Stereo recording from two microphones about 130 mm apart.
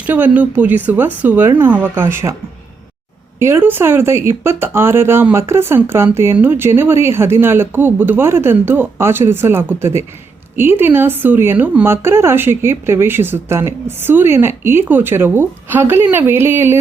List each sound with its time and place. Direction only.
0.0 s speech: 10° right (ahead or behind)
3.3 s speech: 20° right (ahead or behind)